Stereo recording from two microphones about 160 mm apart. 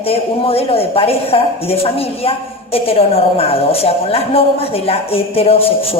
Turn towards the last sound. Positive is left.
turn(degrees=35)  # may be behind; listen again after turning